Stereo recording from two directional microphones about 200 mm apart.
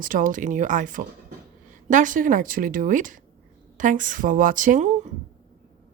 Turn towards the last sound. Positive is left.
turn(degrees=-40)  # may be behind; listen again after turning